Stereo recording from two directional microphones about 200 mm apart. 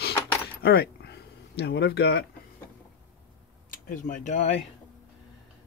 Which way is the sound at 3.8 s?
45° left (ahead or behind).